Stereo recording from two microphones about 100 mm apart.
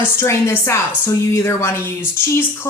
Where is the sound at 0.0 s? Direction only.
25° left (ahead or behind).